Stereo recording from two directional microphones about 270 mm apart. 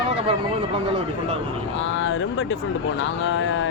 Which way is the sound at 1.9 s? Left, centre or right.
Left.